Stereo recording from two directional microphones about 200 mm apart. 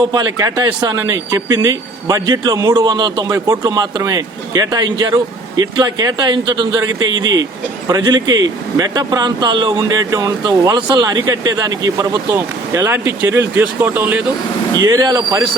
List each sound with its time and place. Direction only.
0.1 s speech: 20° right (ahead or behind)
14.8 s speech: 20° right (ahead or behind)